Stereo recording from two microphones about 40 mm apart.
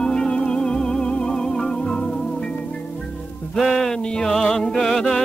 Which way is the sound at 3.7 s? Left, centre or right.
Centre.